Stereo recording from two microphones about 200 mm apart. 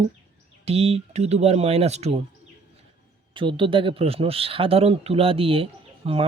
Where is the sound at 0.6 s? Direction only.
30° right (ahead or behind).